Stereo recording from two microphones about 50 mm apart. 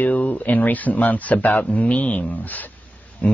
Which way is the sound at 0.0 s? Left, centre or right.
Left.